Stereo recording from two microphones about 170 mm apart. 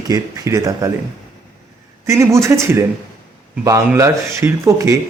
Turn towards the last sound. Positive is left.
turn(degrees=-20)  # may be behind; listen again after turning